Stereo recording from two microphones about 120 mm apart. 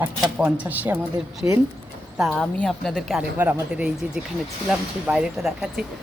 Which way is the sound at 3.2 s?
15° right (ahead or behind).